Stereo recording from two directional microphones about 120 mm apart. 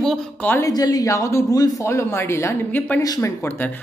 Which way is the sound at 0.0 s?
5° left (ahead or behind).